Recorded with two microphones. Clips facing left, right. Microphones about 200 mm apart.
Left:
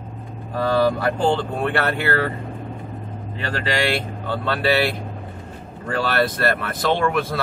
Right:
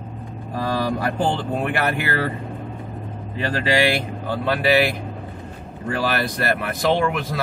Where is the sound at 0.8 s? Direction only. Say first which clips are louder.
Left 3 dB; 15° right (ahead or behind).